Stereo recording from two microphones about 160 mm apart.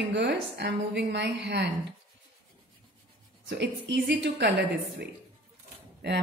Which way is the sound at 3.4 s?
90° right.